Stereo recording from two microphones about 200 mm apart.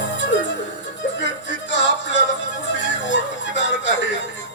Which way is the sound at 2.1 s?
65° left (ahead or behind).